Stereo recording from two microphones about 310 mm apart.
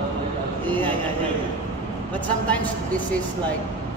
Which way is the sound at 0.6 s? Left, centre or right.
Centre.